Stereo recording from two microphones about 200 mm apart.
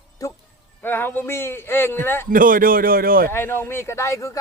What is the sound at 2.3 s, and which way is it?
A man's voice, 45° right (ahead or behind).